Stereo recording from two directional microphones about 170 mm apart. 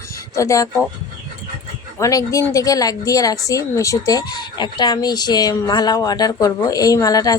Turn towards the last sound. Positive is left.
turn(degrees=20)  # may be behind; listen again after turning